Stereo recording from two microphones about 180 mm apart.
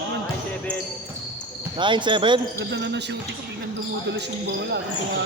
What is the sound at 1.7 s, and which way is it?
Speech, 25° right (ahead or behind).